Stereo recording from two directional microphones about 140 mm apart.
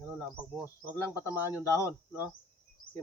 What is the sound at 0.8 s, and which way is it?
Speech, 15° left (ahead or behind).